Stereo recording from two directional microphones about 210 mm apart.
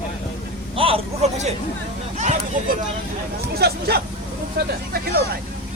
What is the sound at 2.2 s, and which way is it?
Speech, 35° right (ahead or behind).